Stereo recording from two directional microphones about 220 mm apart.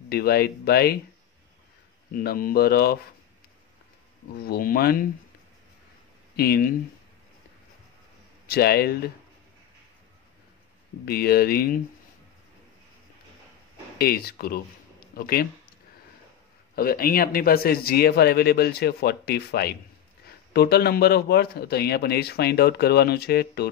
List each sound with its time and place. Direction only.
0.1 s speech: 45° left (ahead or behind)
2.1 s speech: 40° left (ahead or behind)
4.4 s speech: 45° left (ahead or behind)
6.3 s speech: 45° left (ahead or behind)
8.5 s speech: 45° left (ahead or behind)
11.1 s speech: 45° left (ahead or behind)
13.9 s speech: 45° left (ahead or behind)
16.7 s speech: 40° left (ahead or behind)